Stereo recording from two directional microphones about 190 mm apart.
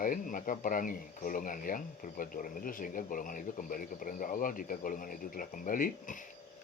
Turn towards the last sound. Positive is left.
turn(degrees=45)  # may be behind; listen again after turning